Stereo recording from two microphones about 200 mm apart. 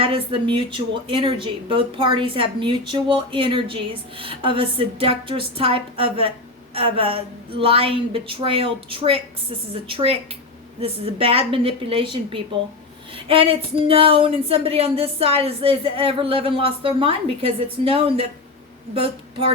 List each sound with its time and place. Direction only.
0.0 s speech: 25° right (ahead or behind)